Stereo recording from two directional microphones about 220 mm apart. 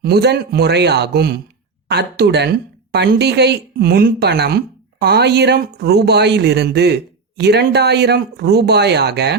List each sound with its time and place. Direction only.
0.0 s speech: 50° right (ahead or behind)